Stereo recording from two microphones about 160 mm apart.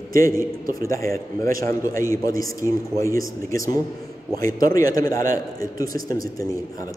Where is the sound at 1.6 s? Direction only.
20° left (ahead or behind).